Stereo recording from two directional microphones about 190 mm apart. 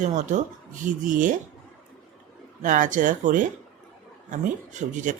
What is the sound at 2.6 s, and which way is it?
Speech, 40° right (ahead or behind).